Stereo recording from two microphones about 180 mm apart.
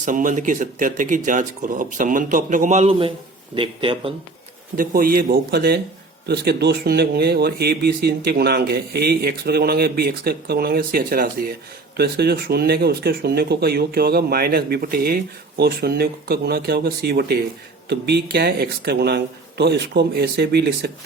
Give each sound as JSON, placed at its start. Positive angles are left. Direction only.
{"t": 0.0, "sound": "speech", "side_deg": -45}
{"t": 4.8, "sound": "speech", "side_deg": -55}